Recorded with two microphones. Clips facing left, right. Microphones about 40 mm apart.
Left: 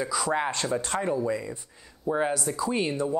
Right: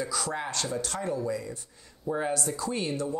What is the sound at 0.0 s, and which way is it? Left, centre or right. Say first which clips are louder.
Speech: left 3 dB; centre.